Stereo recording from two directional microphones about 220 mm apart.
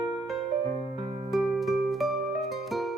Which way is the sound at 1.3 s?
Centre (ahead or behind).